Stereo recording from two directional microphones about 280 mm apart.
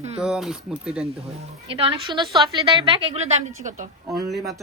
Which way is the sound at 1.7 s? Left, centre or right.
Centre.